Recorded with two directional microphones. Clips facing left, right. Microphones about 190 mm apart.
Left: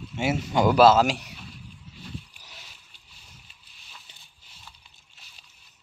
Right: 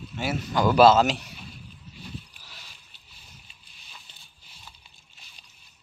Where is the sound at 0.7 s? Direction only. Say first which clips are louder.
Right 1 dB; 5° left (ahead or behind).